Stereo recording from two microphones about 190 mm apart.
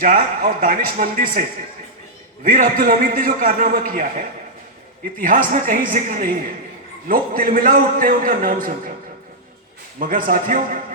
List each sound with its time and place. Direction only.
0.0 s a man's voice: 45° right (ahead or behind)
10.0 s a man's voice: 45° right (ahead or behind)